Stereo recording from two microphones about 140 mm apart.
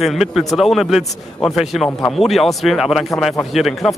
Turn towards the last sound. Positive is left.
turn(degrees=0)  # may be behind; listen again after turning